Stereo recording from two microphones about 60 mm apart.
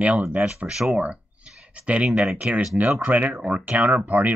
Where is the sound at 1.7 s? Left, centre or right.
Right.